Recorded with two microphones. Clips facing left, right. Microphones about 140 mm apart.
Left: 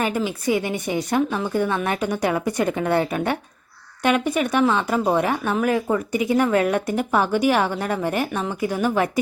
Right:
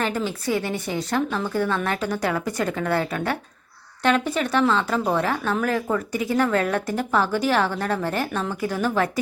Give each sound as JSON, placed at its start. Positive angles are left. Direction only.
{"t": 0.0, "sound": "speech", "side_deg": 10}